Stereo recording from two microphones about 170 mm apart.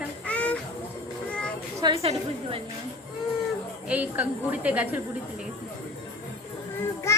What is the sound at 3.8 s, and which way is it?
A woman's voice, 10° right (ahead or behind).